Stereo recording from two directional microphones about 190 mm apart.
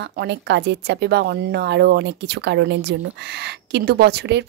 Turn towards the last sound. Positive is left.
turn(degrees=-60)  # may be behind; listen again after turning